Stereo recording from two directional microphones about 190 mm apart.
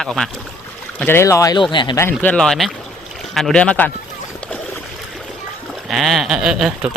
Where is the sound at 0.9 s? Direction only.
10° left (ahead or behind).